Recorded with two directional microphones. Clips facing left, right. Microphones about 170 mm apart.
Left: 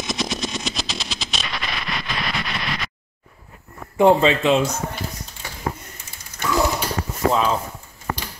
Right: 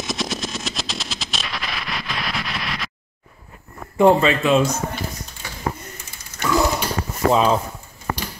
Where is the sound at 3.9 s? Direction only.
20° left (ahead or behind).